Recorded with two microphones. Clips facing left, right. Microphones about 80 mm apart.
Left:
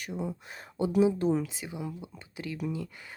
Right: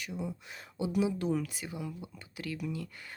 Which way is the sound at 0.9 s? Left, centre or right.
Left.